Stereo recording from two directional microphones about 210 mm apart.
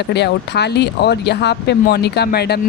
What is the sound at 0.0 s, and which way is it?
A woman's voice, 55° left (ahead or behind).